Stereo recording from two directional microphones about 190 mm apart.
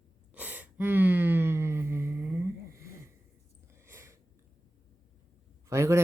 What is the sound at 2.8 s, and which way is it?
Sniff, 15° right (ahead or behind).